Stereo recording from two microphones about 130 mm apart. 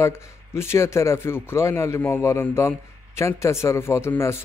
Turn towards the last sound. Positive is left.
turn(degrees=20)  # may be behind; listen again after turning